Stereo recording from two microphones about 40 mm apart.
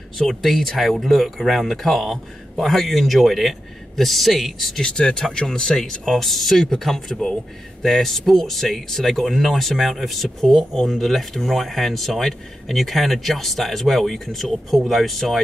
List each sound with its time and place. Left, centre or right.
0.3 s speech: centre
4.8 s speech: centre